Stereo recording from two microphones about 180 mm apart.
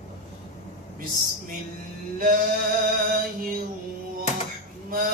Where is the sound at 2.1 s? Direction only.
50° right (ahead or behind).